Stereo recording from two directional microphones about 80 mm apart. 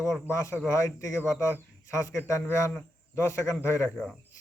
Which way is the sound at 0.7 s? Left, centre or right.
Left.